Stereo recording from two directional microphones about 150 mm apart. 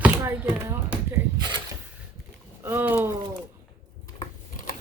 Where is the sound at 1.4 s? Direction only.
30° right (ahead or behind).